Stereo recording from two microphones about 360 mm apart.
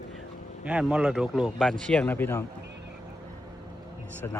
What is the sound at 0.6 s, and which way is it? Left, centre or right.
Speech, centre.